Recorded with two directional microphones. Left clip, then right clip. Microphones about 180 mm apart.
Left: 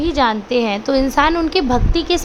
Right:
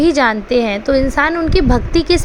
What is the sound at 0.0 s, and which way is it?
A woman's voice, 20° right (ahead or behind).